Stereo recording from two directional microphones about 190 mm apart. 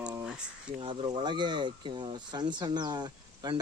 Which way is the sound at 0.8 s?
25° right (ahead or behind).